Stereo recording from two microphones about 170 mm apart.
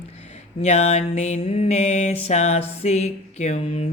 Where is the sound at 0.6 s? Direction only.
40° left (ahead or behind).